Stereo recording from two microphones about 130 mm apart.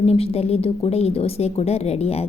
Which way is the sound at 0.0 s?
50° left (ahead or behind).